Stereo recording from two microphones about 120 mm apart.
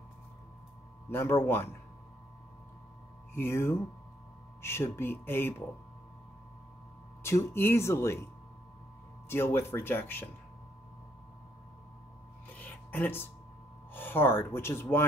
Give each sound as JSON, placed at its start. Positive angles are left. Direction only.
{"t": 1.1, "sound": "speech", "side_deg": 20}
{"t": 3.3, "sound": "speech", "side_deg": 20}
{"t": 7.2, "sound": "speech", "side_deg": 20}
{"t": 9.3, "sound": "speech", "side_deg": 20}
{"t": 12.5, "sound": "a sound", "side_deg": 15}
{"t": 13.9, "sound": "speech", "side_deg": 15}